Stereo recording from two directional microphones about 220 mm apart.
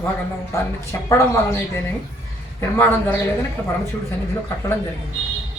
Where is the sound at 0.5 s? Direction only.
15° left (ahead or behind).